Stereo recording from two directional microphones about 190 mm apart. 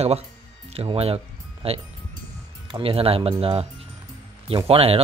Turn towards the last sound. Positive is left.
turn(degrees=-30)  # may be behind; listen again after turning